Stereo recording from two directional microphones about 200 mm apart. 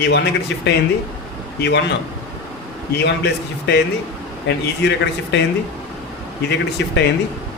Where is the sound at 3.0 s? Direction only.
55° left (ahead or behind).